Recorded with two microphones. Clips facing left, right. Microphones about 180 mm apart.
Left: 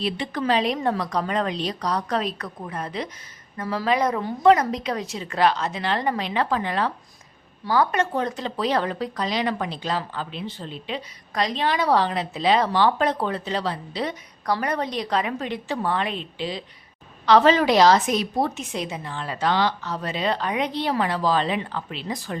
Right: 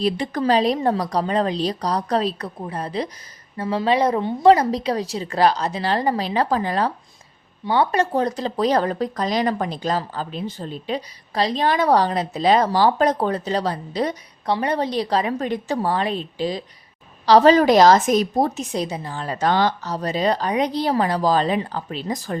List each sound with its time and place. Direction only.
0.0 s speech: 40° right (ahead or behind)
14.4 s speech: 25° right (ahead or behind); by 22.4 s 40° right (ahead or behind)